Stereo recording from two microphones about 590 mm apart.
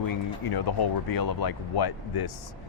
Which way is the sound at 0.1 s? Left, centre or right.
Left.